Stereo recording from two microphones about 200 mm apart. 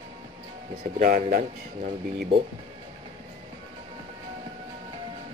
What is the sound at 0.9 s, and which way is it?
Speech, 45° right (ahead or behind).